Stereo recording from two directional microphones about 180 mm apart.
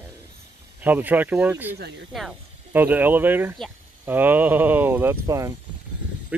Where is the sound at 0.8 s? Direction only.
10° right (ahead or behind).